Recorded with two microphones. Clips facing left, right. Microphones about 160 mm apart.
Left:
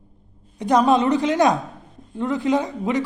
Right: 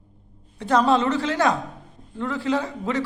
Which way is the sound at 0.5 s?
15° left (ahead or behind).